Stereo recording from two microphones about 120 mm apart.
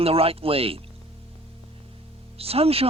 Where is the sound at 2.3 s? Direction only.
55° right (ahead or behind).